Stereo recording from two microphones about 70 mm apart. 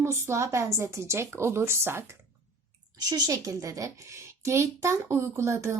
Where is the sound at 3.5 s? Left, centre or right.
Right.